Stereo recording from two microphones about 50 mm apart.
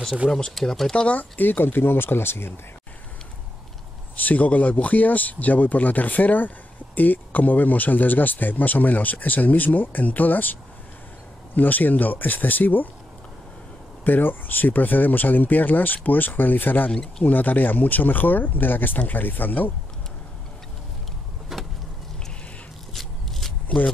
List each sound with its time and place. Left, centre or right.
0.5 s speech: centre
1.0 s speech: left
4.2 s speech: left
14.0 s speech: left
21.5 s vehicle: centre
22.9 s a sound: centre
23.7 s speech: centre